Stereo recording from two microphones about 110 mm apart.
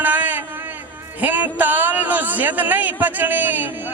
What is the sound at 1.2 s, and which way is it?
A man's voice, 15° right (ahead or behind).